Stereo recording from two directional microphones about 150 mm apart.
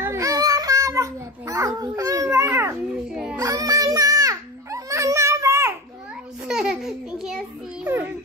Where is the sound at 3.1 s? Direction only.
5° right (ahead or behind).